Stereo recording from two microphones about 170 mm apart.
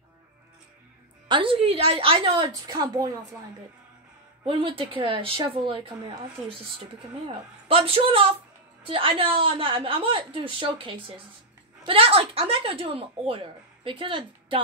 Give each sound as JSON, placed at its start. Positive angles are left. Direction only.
{"t": 1.3, "sound": "a woman's voice", "side_deg": -30}
{"t": 4.5, "sound": "speech", "side_deg": -30}
{"t": 7.6, "sound": "speech", "side_deg": -35}